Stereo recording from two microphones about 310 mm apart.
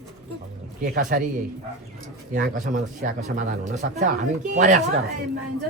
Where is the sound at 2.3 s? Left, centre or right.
Right.